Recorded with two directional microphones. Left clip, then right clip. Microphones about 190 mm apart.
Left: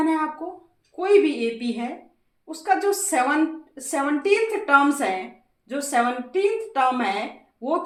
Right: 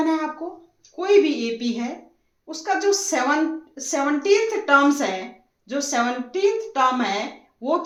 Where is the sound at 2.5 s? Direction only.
25° right (ahead or behind).